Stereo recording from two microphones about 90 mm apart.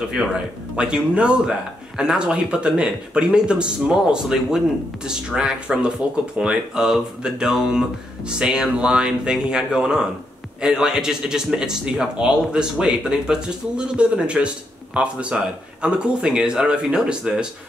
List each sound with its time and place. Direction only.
0.2 s a man's voice: 10° right (ahead or behind)